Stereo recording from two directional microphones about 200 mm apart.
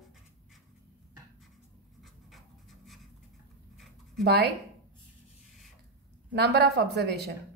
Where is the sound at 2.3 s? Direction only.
Centre (ahead or behind).